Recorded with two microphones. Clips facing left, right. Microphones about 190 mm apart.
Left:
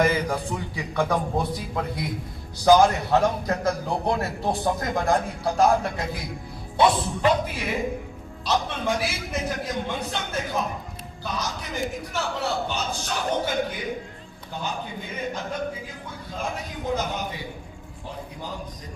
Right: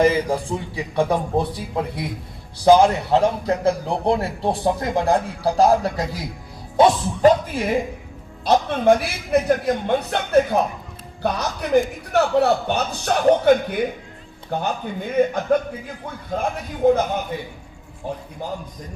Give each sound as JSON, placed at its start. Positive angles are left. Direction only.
{"t": 0.0, "sound": "a man's voice", "side_deg": -30}